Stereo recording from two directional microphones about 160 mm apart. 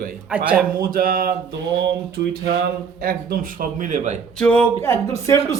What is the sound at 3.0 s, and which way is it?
A man's voice, 65° right (ahead or behind).